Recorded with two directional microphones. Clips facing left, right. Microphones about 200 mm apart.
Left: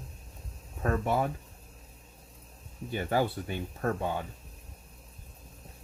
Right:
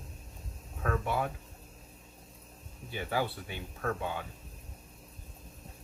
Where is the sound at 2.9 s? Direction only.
45° left (ahead or behind).